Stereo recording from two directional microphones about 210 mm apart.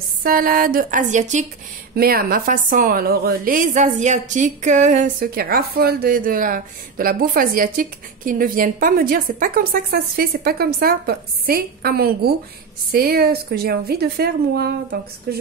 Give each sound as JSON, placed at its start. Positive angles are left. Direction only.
{"t": 0.2, "sound": "speech", "side_deg": -45}
{"t": 2.0, "sound": "a woman's voice", "side_deg": -45}